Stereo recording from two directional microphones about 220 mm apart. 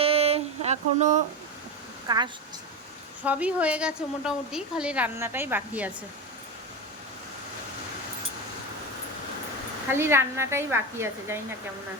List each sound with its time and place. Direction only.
0.0 s a sound: 25° right (ahead or behind)
2.0 s a woman's voice: 20° right (ahead or behind)
3.2 s a woman's voice: 5° right (ahead or behind)
9.9 s a woman's voice: 10° right (ahead or behind)